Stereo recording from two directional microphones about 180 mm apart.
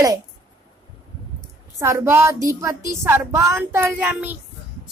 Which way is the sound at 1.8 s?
15° right (ahead or behind).